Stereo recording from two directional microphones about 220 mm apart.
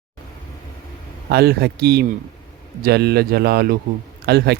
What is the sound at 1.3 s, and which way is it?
Speech, 45° right (ahead or behind).